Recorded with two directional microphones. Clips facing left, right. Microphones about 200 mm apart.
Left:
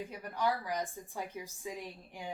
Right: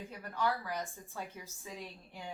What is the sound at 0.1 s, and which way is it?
A woman's voice, 15° left (ahead or behind).